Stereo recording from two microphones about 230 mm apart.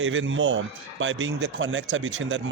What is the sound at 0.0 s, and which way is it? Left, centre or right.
A man's voice, right.